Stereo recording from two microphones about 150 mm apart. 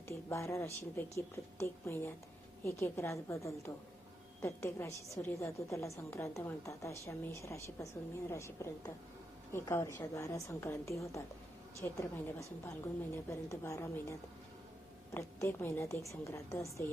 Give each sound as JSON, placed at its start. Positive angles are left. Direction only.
{"t": 0.1, "sound": "a woman's voice", "side_deg": 20}